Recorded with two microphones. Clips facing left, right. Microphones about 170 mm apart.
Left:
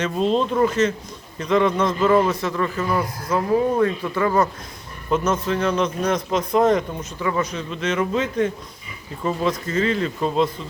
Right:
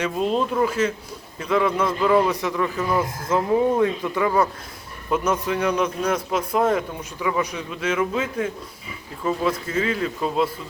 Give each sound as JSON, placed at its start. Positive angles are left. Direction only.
{"t": 0.0, "sound": "a man's voice", "side_deg": -10}